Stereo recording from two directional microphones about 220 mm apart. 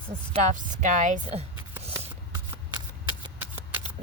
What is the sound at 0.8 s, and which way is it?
Speech, 35° right (ahead or behind).